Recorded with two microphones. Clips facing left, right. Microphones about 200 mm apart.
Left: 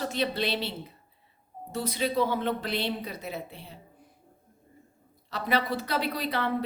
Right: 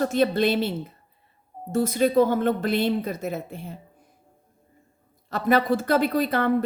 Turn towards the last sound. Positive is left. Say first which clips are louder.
# right 7 dB
turn(degrees=-50)  # may be behind; listen again after turning